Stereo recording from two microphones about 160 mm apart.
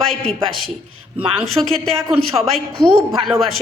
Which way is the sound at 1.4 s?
Centre (ahead or behind).